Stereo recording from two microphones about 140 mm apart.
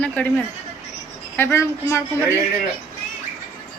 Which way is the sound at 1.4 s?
20° left (ahead or behind).